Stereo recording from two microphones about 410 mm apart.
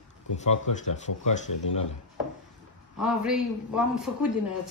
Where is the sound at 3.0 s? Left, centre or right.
Centre.